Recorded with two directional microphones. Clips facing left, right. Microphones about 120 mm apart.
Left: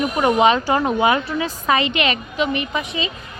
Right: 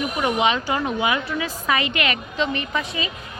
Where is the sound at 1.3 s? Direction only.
35° left (ahead or behind); by 3.1 s 15° left (ahead or behind).